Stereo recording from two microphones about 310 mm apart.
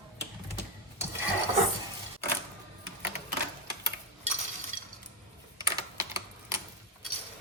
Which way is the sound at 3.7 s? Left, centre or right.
Centre.